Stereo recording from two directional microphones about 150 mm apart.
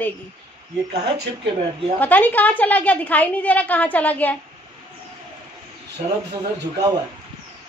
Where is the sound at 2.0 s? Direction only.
10° left (ahead or behind).